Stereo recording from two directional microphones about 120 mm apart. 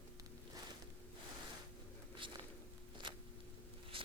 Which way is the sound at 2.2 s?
45° right (ahead or behind).